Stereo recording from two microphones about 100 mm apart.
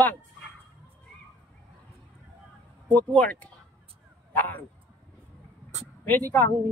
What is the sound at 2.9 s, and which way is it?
A man's voice, 15° left (ahead or behind).